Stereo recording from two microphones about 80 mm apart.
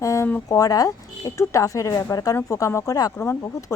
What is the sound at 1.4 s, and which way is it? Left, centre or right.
Speech, left.